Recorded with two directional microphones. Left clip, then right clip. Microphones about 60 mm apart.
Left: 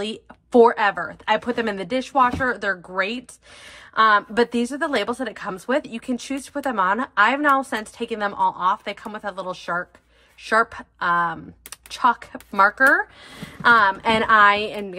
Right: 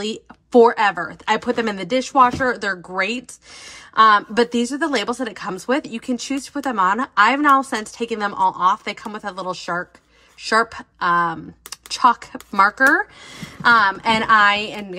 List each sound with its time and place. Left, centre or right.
0.5 s speech: centre
0.7 s a woman's voice: right